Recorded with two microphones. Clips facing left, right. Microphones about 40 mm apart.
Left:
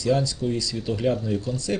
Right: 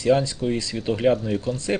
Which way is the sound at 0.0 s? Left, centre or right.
Right.